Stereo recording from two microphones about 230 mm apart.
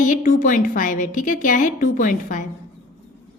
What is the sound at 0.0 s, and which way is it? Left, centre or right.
A woman's voice, left.